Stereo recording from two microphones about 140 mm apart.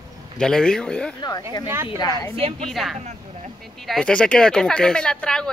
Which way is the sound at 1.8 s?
30° left (ahead or behind).